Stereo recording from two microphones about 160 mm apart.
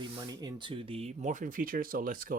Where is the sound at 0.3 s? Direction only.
30° right (ahead or behind).